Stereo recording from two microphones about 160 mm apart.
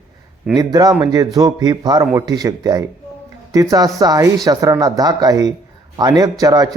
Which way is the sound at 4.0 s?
20° right (ahead or behind).